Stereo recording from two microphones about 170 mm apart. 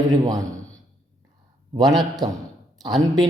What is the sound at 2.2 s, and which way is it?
Speech, 25° right (ahead or behind).